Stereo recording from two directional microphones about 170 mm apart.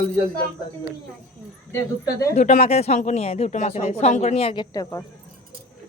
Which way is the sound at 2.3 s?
40° left (ahead or behind).